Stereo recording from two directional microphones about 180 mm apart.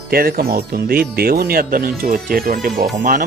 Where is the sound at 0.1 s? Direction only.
55° right (ahead or behind).